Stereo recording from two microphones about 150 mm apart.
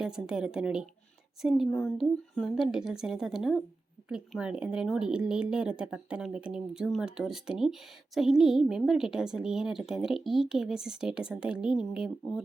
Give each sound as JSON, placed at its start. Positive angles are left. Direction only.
{"t": 0.0, "sound": "speech", "side_deg": -5}